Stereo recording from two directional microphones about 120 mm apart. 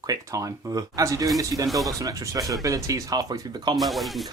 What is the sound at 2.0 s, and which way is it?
Speech, 30° right (ahead or behind).